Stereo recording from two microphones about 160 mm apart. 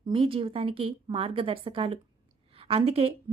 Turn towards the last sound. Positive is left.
turn(degrees=-35)  # may be behind; listen again after turning